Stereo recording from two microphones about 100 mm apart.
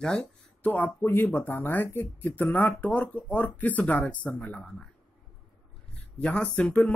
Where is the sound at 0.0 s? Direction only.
5° left (ahead or behind).